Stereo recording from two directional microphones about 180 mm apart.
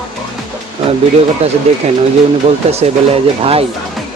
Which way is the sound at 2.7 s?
35° right (ahead or behind).